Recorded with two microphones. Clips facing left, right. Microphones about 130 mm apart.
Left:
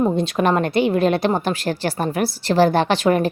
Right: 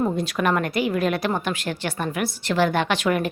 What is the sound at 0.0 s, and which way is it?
A woman's voice, 25° left (ahead or behind).